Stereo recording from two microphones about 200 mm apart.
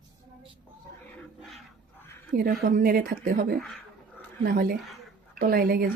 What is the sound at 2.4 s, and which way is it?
Speech, 50° right (ahead or behind).